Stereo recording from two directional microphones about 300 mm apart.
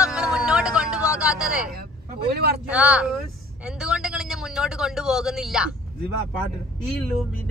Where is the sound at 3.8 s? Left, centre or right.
Centre.